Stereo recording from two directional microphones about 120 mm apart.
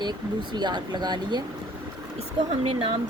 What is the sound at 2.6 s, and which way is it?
Speech, 50° right (ahead or behind).